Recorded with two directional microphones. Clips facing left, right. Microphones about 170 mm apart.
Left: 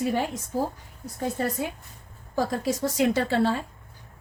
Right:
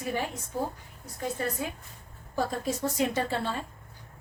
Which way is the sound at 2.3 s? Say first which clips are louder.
Left 4 dB; 90° left.